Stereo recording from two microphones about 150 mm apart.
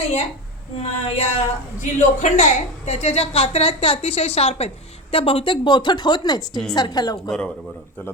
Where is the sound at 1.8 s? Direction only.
55° left (ahead or behind); by 6.4 s 30° left (ahead or behind).